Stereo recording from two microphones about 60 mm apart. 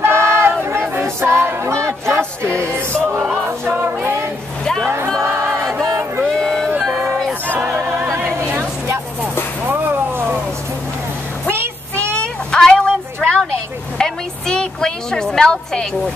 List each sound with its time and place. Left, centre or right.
0.0 s battle cry: right
1.2 s a sound: right
2.6 s music: right
5.2 s choir: right
5.6 s choir: centre
6.2 s a sound: centre
6.8 s music: centre
8.5 s vehicle: right
11.4 s child singing: right
12.2 s a sound: centre